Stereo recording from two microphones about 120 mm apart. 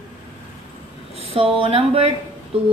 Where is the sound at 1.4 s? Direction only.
50° right (ahead or behind).